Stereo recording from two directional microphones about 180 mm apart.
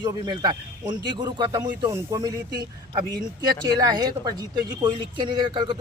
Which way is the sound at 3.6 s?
20° right (ahead or behind).